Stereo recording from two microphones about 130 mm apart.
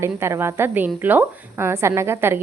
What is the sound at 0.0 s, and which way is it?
A woman's voice, 20° right (ahead or behind).